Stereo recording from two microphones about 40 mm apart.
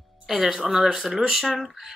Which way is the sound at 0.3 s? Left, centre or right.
Centre.